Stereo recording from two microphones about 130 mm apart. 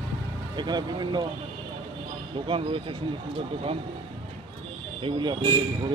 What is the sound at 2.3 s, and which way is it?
Speech, 40° right (ahead or behind).